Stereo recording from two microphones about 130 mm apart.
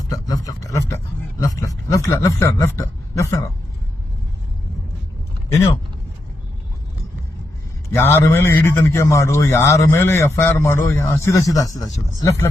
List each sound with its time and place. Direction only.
0.1 s speech: 30° left (ahead or behind)
7.9 s a man's voice: 20° left (ahead or behind)